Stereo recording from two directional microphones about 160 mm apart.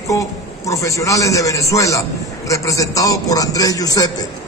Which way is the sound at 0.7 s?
20° left (ahead or behind).